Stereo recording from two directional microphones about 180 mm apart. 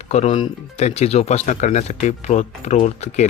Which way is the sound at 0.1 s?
40° left (ahead or behind).